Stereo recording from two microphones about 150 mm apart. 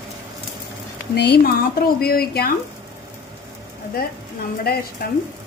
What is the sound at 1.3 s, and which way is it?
Speech, 85° left.